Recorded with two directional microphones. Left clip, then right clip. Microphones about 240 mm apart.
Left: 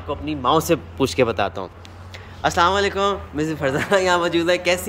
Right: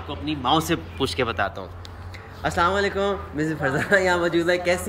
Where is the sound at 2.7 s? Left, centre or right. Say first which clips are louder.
Left 3 dB; centre.